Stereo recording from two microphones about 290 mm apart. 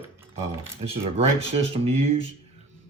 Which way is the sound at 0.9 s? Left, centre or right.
Centre.